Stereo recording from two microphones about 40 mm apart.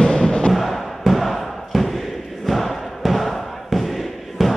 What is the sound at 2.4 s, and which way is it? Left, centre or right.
Crowd, centre.